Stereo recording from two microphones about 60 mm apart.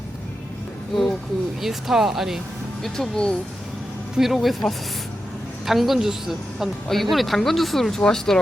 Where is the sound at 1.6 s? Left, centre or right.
Centre.